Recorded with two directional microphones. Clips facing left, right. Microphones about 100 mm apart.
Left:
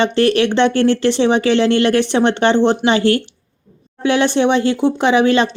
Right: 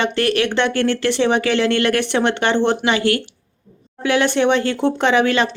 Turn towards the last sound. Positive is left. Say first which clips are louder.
# left 3 dB
turn(degrees=20)  # may be behind; listen again after turning